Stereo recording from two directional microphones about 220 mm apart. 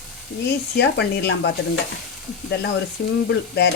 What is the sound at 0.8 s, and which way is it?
Speech, 50° left (ahead or behind).